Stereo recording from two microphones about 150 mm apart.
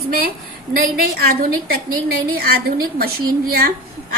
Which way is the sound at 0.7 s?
85° right.